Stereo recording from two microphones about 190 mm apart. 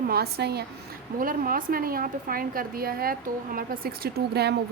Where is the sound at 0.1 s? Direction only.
55° right (ahead or behind).